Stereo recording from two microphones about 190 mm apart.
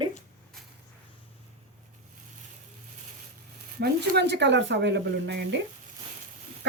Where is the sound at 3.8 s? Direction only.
60° right (ahead or behind).